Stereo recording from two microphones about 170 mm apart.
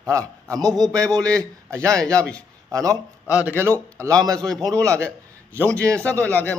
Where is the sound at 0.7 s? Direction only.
5° left (ahead or behind).